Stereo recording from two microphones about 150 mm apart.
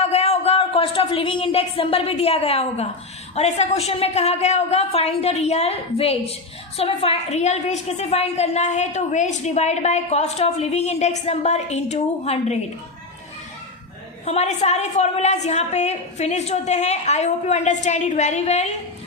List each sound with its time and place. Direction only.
0.0 s a woman's voice: 45° left (ahead or behind)
14.3 s a woman's voice: 45° left (ahead or behind)